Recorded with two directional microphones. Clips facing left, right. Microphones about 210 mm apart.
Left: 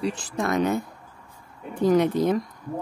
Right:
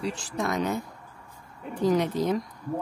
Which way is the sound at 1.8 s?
55° left (ahead or behind).